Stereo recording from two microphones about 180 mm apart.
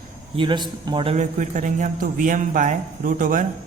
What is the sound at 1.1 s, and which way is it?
A man's voice, 45° right (ahead or behind).